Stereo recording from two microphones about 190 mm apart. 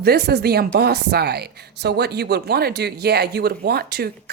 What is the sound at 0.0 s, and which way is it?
A woman's voice, 55° right (ahead or behind).